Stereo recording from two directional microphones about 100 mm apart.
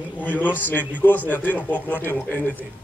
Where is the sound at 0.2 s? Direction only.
15° left (ahead or behind).